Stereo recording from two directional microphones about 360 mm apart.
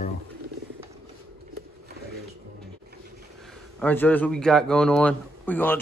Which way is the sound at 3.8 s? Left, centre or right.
Centre.